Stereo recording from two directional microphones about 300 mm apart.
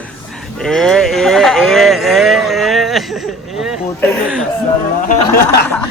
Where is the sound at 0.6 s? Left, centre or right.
Centre.